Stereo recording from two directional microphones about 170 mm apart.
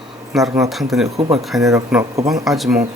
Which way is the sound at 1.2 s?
35° right (ahead or behind).